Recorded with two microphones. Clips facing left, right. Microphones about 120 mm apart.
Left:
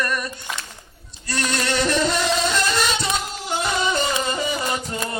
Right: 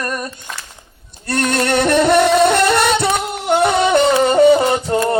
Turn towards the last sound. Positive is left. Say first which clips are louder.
# right 11 dB
turn(degrees=-65)  # may be behind; listen again after turning